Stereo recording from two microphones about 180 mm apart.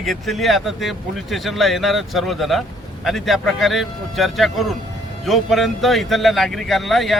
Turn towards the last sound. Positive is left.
turn(degrees=0)  # may be behind; listen again after turning